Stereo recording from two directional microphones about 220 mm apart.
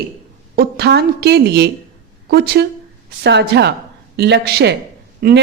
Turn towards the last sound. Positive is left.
turn(degrees=-45)  # may be behind; listen again after turning